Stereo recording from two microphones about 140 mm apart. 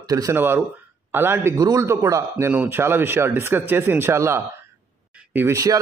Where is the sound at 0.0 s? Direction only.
25° right (ahead or behind).